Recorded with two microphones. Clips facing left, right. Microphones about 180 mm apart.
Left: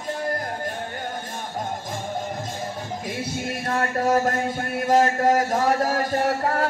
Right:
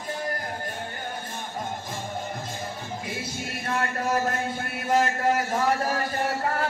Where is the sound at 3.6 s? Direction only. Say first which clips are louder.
Left 4 dB; 45° left (ahead or behind).